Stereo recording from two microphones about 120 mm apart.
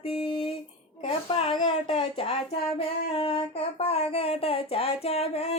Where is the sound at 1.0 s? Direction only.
55° left (ahead or behind).